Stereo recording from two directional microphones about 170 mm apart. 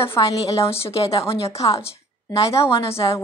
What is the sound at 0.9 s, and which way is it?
Speech, 35° left (ahead or behind).